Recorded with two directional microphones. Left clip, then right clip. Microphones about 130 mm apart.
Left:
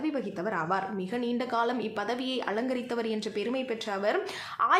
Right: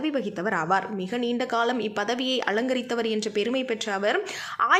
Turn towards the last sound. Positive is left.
turn(degrees=-25)  # may be behind; listen again after turning